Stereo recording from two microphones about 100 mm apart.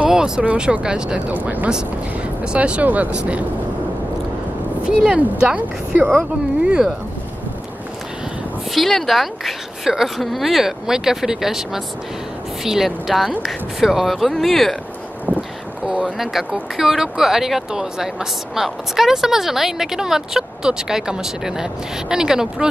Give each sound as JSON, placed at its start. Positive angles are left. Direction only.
{"t": 0.0, "sound": "speech", "side_deg": -10}
{"t": 4.8, "sound": "speech", "side_deg": -10}
{"t": 8.7, "sound": "speech", "side_deg": 0}
{"t": 15.3, "sound": "a sound", "side_deg": -25}
{"t": 15.9, "sound": "speech", "side_deg": -5}